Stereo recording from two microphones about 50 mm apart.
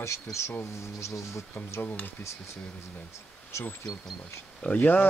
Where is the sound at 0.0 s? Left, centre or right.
Left.